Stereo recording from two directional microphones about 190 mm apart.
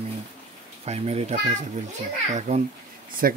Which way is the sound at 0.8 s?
35° right (ahead or behind).